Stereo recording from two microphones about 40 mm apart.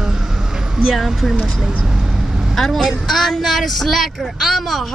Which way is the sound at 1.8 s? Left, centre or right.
Centre.